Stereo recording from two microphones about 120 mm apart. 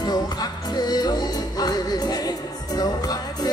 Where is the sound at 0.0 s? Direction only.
35° left (ahead or behind).